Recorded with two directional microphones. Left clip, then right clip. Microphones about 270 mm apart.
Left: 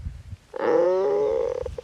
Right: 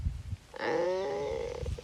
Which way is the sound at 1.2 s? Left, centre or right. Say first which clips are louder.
Left 12 dB; left.